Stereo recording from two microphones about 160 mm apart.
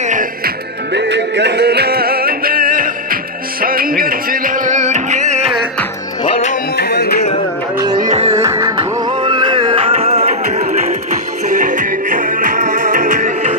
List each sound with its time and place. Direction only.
0.0 s music: 50° right (ahead or behind)
0.9 s music: 90° right; by 5.5 s 50° right (ahead or behind)
6.8 s music: 90° left
8.0 s music: 45° right (ahead or behind)
8.3 s music: 20° right (ahead or behind)
8.7 s music: 30° right (ahead or behind); by 13.6 s 50° right (ahead or behind)